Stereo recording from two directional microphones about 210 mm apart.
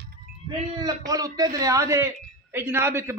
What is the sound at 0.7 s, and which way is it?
A man's voice, 15° right (ahead or behind).